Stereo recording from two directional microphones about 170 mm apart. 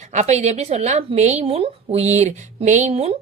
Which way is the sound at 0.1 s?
40° right (ahead or behind).